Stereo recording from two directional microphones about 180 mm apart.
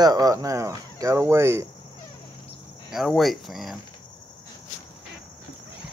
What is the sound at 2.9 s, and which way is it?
Speech, centre (ahead or behind).